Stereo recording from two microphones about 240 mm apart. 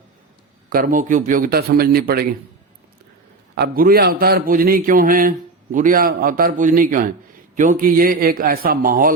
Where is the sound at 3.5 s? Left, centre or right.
Right.